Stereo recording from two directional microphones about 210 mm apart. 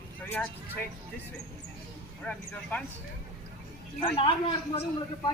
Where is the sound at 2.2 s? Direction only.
5° left (ahead or behind).